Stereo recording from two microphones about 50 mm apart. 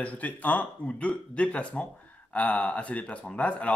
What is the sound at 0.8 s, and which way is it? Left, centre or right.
Speech, left.